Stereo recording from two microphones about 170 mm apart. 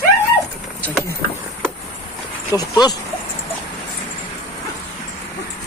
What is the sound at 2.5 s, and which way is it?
Speech, 25° left (ahead or behind).